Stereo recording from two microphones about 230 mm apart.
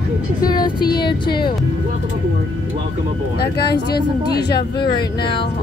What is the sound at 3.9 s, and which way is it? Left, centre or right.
Speech, left.